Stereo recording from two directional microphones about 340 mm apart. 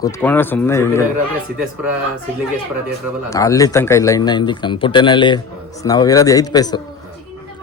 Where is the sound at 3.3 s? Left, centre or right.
Centre.